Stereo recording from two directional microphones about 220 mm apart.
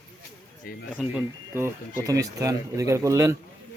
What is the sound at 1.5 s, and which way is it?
Speech, 10° right (ahead or behind).